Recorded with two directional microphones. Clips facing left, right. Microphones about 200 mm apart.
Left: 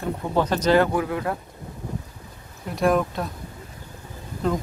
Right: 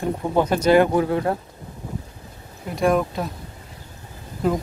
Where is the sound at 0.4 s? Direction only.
10° right (ahead or behind).